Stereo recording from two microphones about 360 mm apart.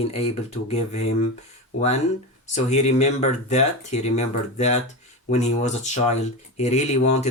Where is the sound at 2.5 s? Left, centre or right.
Centre.